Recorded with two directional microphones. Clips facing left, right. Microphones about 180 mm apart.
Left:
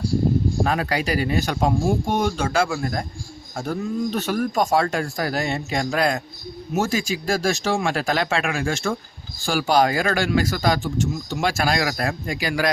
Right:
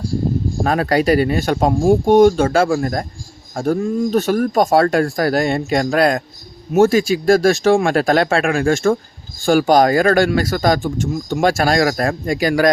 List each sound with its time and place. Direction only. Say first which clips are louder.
0.6 s speech: right 6 dB; 45° right (ahead or behind)